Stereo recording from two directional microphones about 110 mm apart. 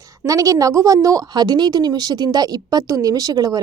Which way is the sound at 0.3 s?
35° right (ahead or behind).